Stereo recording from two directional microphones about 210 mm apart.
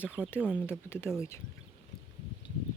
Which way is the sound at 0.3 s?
5° right (ahead or behind).